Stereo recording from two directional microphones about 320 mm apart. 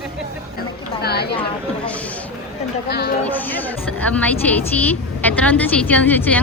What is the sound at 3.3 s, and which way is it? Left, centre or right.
A woman's voice, centre.